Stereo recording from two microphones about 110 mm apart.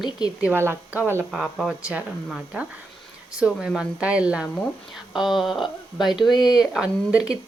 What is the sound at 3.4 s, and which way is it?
A woman's voice, 5° right (ahead or behind).